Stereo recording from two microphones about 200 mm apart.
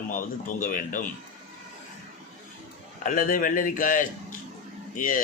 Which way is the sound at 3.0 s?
40° left (ahead or behind).